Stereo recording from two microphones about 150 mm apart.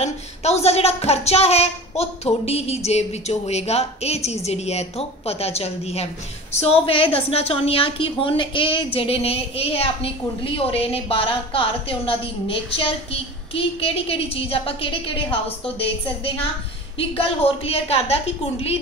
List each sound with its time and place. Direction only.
0.0 s a woman's voice: 45° left (ahead or behind)
17.2 s a woman's voice: 40° left (ahead or behind)